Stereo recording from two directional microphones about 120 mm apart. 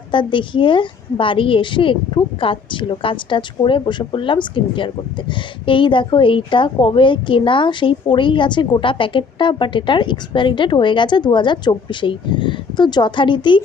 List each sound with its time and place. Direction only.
0.1 s a woman's voice: 45° left (ahead or behind)